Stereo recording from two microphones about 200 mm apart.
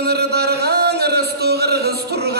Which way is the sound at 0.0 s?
55° right (ahead or behind).